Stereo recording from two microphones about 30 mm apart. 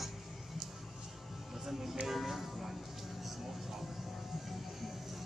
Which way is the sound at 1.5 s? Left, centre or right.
Centre.